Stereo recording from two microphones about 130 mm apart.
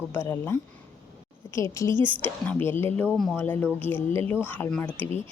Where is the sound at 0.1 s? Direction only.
20° left (ahead or behind).